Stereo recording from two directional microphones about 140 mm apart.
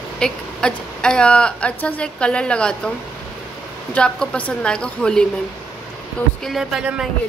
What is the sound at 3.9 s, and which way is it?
Speech, 5° left (ahead or behind).